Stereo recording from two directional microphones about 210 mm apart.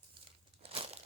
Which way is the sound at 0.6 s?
25° right (ahead or behind).